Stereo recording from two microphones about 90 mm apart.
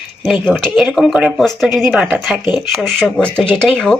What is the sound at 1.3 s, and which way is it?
A woman's voice, 5° left (ahead or behind).